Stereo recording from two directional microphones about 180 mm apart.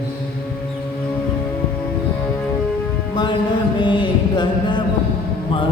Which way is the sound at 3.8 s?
25° left (ahead or behind).